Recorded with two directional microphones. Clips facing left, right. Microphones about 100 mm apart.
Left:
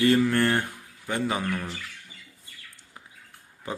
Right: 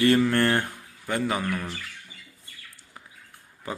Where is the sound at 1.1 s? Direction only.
20° left (ahead or behind).